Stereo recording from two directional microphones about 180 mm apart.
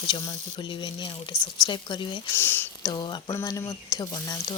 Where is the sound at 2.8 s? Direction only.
25° left (ahead or behind).